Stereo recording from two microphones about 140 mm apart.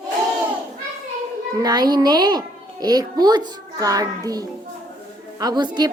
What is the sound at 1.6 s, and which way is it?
A woman's voice, 30° right (ahead or behind).